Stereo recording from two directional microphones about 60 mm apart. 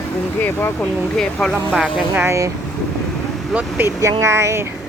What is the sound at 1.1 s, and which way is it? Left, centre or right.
Speech, centre.